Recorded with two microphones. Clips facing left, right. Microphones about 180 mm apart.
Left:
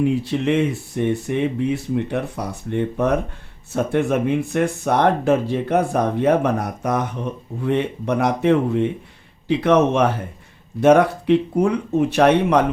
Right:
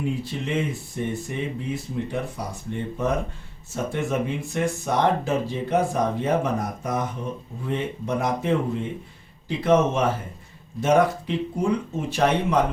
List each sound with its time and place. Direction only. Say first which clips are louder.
0.0 s speech: left 9 dB; 70° left (ahead or behind)